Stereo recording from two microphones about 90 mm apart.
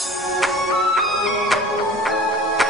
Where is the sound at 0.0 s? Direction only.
Centre (ahead or behind).